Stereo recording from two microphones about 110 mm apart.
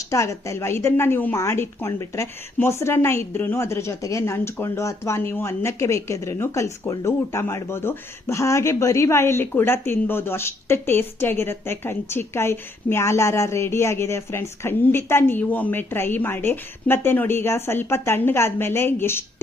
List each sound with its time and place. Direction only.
0.1 s speech: 30° left (ahead or behind)